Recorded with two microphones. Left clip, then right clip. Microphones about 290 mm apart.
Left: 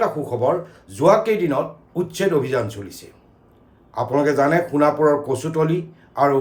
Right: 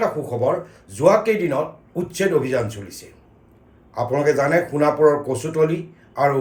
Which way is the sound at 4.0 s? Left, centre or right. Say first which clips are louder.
Left 1 dB; centre.